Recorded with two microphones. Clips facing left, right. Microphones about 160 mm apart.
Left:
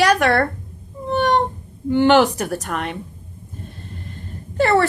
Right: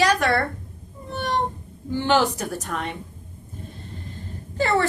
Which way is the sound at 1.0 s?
70° left (ahead or behind).